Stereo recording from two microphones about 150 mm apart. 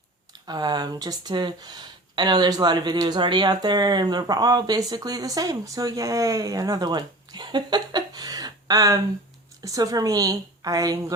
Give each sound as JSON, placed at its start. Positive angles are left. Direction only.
{"t": 0.4, "sound": "speech", "side_deg": -30}